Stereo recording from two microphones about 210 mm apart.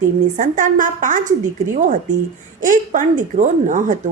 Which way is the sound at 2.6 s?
40° right (ahead or behind).